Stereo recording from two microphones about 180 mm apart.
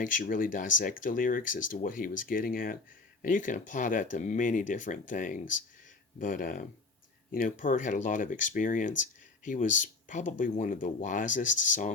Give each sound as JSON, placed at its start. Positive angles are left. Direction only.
{"t": 0.0, "sound": "speech", "side_deg": 50}